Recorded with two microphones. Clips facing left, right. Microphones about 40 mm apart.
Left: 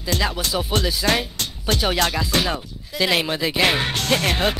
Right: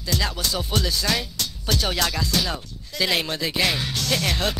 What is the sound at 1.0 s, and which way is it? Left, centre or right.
Speech, left.